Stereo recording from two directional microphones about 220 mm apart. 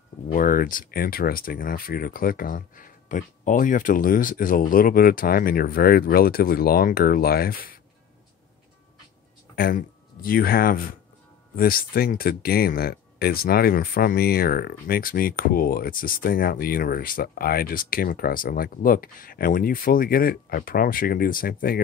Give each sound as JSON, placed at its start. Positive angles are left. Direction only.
{"t": 0.3, "sound": "speech", "side_deg": 40}
{"t": 9.6, "sound": "speech", "side_deg": 40}